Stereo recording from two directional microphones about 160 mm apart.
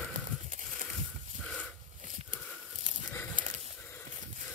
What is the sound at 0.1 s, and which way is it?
Goat, 55° right (ahead or behind).